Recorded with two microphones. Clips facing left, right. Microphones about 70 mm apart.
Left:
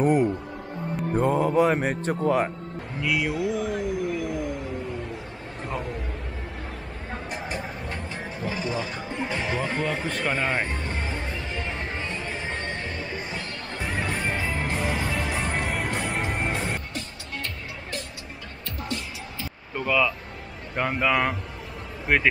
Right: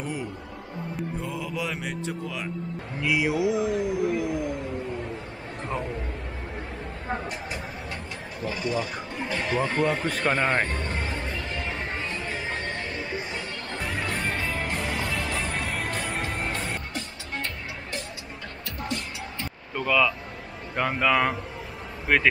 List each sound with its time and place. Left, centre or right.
0.0 s speech: left
3.0 s speech: centre
3.8 s music: centre
7.2 s vehicle: centre
8.5 s a sound: centre
16.6 s music: centre
19.7 s speech: centre